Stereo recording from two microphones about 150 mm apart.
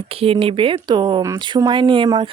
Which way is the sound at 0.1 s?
40° right (ahead or behind).